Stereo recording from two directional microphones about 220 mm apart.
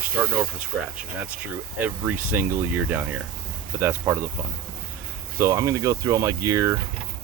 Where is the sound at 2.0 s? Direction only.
10° right (ahead or behind).